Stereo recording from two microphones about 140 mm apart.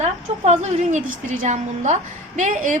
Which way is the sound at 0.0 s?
50° right (ahead or behind).